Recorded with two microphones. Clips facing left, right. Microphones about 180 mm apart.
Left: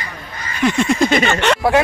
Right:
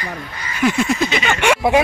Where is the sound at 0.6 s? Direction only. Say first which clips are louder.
Left 1 dB; 5° right (ahead or behind).